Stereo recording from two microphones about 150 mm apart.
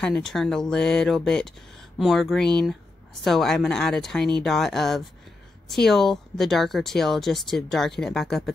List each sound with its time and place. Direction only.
0.0 s a woman's voice: 5° left (ahead or behind)